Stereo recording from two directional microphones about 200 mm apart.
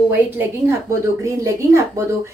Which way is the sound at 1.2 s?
15° right (ahead or behind).